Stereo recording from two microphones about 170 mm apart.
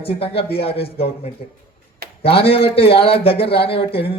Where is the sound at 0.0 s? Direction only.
35° left (ahead or behind).